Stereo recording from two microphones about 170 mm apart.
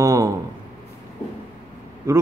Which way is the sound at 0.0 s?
20° right (ahead or behind).